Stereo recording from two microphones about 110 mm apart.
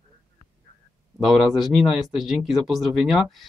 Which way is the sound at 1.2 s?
Centre (ahead or behind).